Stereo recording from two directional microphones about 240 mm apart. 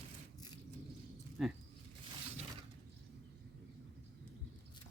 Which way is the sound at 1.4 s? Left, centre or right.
Centre.